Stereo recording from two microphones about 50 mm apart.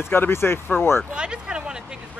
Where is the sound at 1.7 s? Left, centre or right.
Centre.